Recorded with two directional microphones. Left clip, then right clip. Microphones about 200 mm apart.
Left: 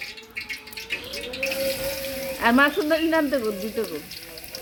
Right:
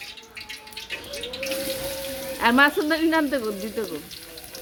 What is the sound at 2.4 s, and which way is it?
Speech, 15° right (ahead or behind).